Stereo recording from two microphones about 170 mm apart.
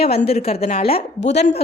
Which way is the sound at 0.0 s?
35° left (ahead or behind).